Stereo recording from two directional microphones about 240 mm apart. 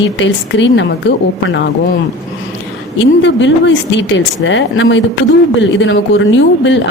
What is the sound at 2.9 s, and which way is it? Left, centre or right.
A woman's voice, left.